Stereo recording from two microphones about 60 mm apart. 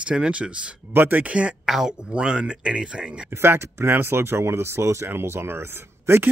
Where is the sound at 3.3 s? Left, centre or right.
Right.